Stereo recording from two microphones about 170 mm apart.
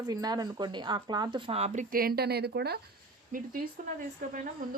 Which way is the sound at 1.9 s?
65° right (ahead or behind).